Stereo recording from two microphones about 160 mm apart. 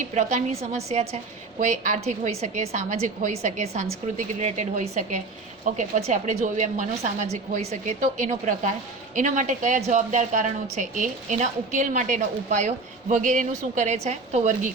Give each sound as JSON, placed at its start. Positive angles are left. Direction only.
{"t": 0.1, "sound": "a woman's voice", "side_deg": -45}